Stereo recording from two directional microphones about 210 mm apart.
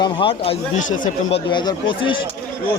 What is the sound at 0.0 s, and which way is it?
Speech, 25° left (ahead or behind).